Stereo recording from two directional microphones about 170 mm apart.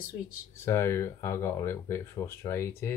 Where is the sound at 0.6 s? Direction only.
15° left (ahead or behind).